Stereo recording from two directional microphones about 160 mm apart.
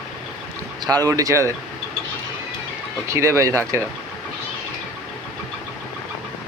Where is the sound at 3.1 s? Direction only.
20° right (ahead or behind).